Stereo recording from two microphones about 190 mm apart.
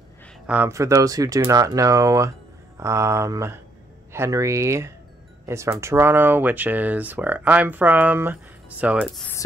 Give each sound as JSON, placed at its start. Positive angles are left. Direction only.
{"t": 0.5, "sound": "speech", "side_deg": -10}